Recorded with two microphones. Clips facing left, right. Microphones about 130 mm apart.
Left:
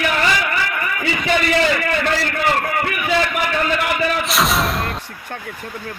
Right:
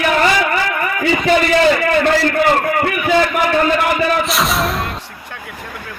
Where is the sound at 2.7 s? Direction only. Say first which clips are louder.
Right 5 dB; 45° right (ahead or behind).